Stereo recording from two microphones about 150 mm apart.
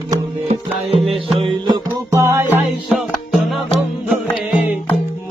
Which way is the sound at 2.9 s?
Centre (ahead or behind).